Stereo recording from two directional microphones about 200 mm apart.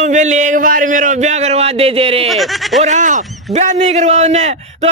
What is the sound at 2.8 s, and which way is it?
Speech, 40° right (ahead or behind).